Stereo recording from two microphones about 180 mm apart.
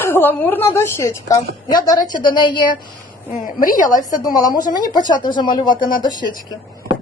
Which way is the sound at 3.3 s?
50° left (ahead or behind).